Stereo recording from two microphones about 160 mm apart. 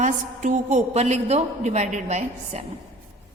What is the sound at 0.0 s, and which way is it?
Mantra, 50° right (ahead or behind).